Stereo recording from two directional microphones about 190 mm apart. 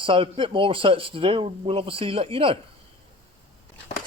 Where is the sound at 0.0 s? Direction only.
30° right (ahead or behind).